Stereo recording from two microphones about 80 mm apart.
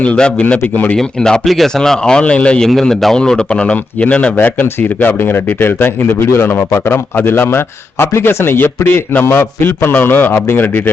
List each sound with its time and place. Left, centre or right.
0.0 s speech: centre
0.9 s speech: centre
4.4 s a man's voice: left